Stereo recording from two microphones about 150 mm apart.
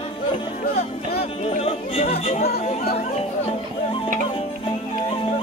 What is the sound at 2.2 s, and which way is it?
Chatter, 45° left (ahead or behind).